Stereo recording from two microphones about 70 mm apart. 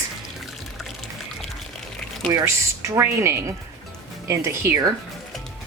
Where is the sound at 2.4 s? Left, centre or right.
Right.